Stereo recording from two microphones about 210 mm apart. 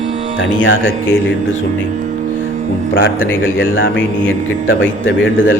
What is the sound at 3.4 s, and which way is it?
A man's voice, 70° left (ahead or behind).